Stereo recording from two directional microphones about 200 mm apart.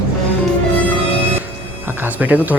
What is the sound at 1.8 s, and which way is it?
Music, 10° right (ahead or behind).